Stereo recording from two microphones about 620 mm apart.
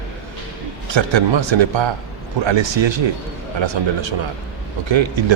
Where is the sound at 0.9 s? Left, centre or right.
Right.